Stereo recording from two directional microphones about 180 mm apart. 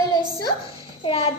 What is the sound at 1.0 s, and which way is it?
Speech, 30° left (ahead or behind).